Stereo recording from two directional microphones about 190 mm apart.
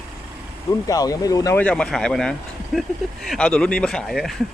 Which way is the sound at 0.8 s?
20° left (ahead or behind).